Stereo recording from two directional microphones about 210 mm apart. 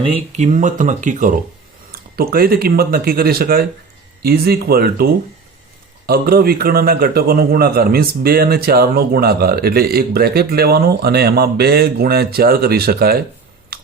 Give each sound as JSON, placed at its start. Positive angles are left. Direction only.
{"t": 0.0, "sound": "a man's voice", "side_deg": -30}
{"t": 6.1, "sound": "a man's voice", "side_deg": -45}